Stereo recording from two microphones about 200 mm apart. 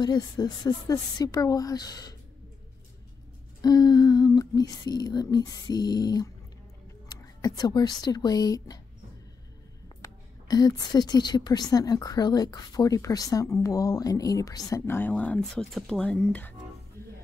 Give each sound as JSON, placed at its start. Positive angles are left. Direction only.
{"t": 0.0, "sound": "speech", "side_deg": 20}
{"t": 3.6, "sound": "speech", "side_deg": 20}
{"t": 7.4, "sound": "speech", "side_deg": 20}
{"t": 10.0, "sound": "a woman's voice", "side_deg": 20}